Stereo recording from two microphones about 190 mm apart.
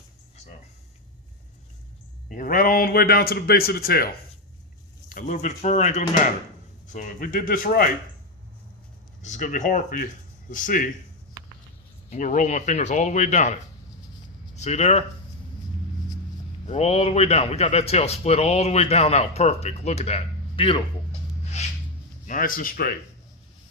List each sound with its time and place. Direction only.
2.3 s a man's voice: 45° left (ahead or behind)
5.0 s a man's voice: 45° left (ahead or behind)
9.2 s a man's voice: 40° left (ahead or behind)
12.1 s a man's voice: 40° left (ahead or behind)
14.5 s speech: 35° left (ahead or behind)
16.6 s a man's voice: 35° left (ahead or behind)
21.6 s a sound: 35° left (ahead or behind)
22.3 s a man's voice: 45° left (ahead or behind)